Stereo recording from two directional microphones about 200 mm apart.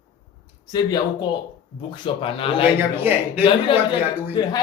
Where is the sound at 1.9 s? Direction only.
25° left (ahead or behind).